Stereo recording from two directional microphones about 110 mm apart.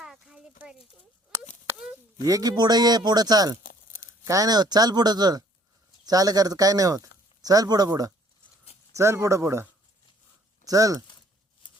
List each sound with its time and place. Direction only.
0.0 s a sound: 10° right (ahead or behind)
2.2 s speech: 35° right (ahead or behind)
10.7 s speech: 30° right (ahead or behind)